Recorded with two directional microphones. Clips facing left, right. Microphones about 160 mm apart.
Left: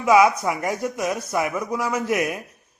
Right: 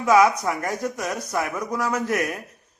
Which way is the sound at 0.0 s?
10° left (ahead or behind).